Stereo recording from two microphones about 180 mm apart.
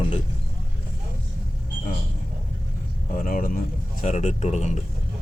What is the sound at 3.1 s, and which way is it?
A man's voice, 50° left (ahead or behind).